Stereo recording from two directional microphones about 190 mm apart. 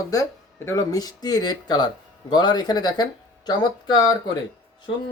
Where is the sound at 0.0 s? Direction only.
15° left (ahead or behind).